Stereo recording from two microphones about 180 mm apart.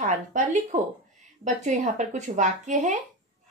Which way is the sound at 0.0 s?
45° right (ahead or behind).